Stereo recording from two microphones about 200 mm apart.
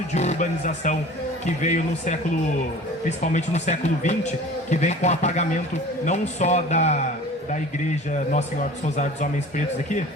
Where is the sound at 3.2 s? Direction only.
35° left (ahead or behind).